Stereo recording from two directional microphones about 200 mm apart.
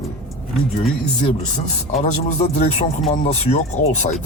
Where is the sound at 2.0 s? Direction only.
35° left (ahead or behind).